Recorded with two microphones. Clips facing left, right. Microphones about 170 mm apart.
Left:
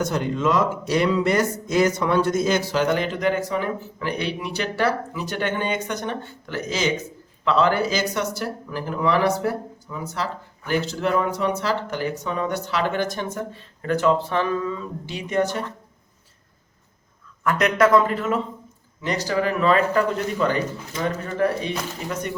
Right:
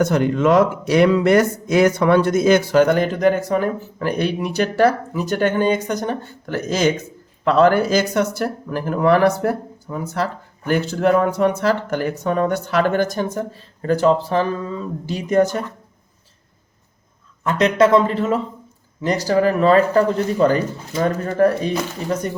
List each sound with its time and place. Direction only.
0.0 s speech: 60° right (ahead or behind); by 15.4 s 40° right (ahead or behind)
17.4 s speech: 25° right (ahead or behind); by 21.7 s 45° right (ahead or behind)